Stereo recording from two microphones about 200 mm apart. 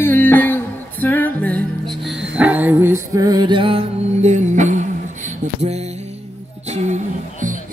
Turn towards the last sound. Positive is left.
turn(degrees=-40)  # may be behind; listen again after turning